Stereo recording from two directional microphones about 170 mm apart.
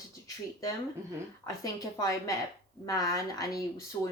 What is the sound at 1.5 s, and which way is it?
Speech, 20° left (ahead or behind).